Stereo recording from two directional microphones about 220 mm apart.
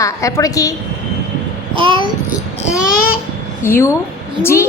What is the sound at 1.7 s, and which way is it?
Babbling, 20° right (ahead or behind).